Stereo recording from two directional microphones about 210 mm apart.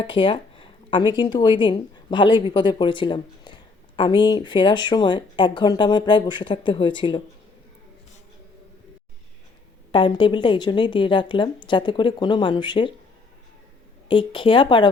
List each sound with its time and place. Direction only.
0.0 s speech: 25° left (ahead or behind)
9.9 s speech: 25° left (ahead or behind)
14.1 s speech: 25° left (ahead or behind)